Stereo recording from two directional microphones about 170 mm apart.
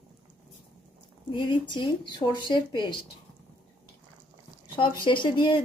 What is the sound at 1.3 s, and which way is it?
Speech, 30° left (ahead or behind).